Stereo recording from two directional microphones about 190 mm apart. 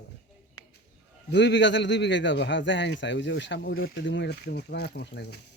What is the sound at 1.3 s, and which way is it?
A man's voice, 65° left (ahead or behind).